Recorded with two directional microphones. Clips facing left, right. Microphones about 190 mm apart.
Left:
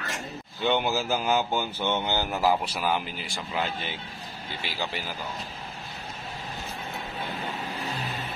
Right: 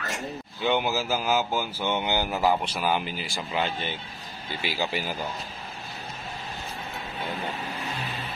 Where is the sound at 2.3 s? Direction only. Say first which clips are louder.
Left 1 dB; centre (ahead or behind).